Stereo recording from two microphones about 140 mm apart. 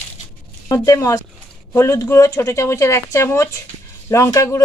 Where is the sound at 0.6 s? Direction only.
25° left (ahead or behind).